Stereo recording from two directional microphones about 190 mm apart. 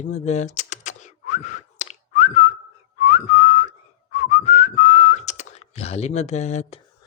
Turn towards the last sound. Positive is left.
turn(degrees=35)  # may be behind; listen again after turning